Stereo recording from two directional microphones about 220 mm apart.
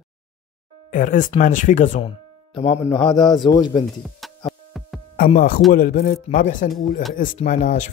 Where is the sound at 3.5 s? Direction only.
20° left (ahead or behind).